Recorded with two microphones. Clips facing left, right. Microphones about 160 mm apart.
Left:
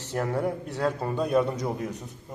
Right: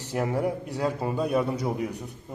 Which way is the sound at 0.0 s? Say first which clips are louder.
Right 1 dB; 10° right (ahead or behind).